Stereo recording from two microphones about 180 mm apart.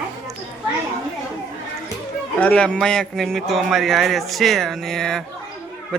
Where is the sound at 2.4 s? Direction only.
5° left (ahead or behind).